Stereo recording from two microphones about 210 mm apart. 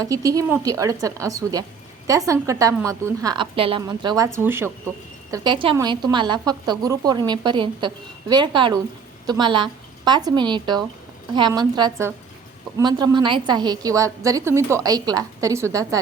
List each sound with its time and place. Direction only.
0.0 s a woman's voice: 15° right (ahead or behind)
5.3 s a woman's voice: 20° right (ahead or behind)